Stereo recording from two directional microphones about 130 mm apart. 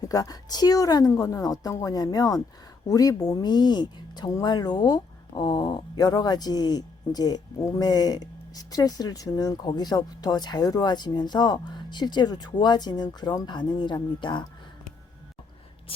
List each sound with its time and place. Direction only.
0.0 s a woman's voice: 30° left (ahead or behind)